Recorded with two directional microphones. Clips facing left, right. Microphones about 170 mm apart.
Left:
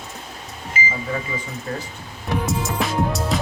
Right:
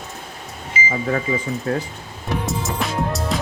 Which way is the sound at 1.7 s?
60° right (ahead or behind).